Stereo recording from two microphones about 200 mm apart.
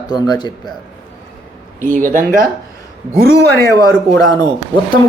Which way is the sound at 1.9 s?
40° right (ahead or behind).